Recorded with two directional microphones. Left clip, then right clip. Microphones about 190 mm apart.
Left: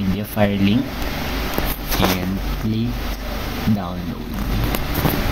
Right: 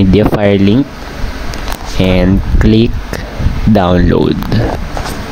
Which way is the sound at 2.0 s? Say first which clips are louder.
Right 6 dB; 45° right (ahead or behind).